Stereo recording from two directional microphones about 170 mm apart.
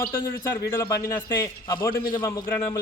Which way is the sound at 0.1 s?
15° left (ahead or behind).